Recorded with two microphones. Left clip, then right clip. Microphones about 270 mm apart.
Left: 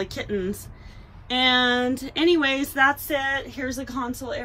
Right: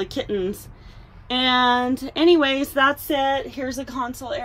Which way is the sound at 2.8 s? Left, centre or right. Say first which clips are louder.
Right 2 dB; left.